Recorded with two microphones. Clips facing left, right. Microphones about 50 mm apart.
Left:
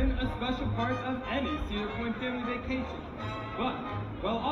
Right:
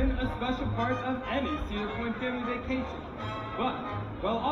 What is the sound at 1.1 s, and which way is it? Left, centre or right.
Speech, right.